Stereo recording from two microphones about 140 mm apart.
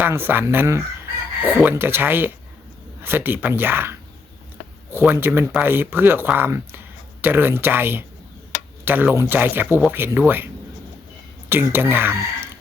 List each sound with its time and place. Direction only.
0.0 s speech: 15° right (ahead or behind)